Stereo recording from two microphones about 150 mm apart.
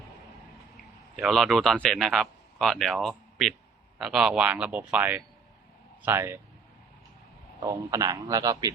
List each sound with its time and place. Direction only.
1.1 s a man's voice: centre (ahead or behind); by 6.4 s 15° right (ahead or behind)
7.6 s a man's voice: 25° right (ahead or behind)